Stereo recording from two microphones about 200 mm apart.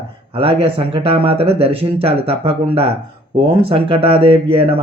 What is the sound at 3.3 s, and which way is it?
Speech, 25° right (ahead or behind).